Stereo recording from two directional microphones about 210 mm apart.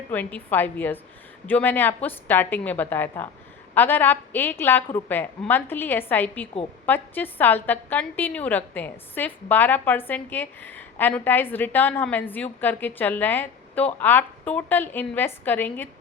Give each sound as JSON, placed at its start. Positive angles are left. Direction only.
{"t": 0.1, "sound": "a woman's voice", "side_deg": 5}